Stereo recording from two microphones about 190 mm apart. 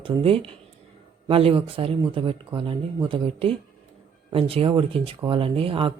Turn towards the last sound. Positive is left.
turn(degrees=-30)  # may be behind; listen again after turning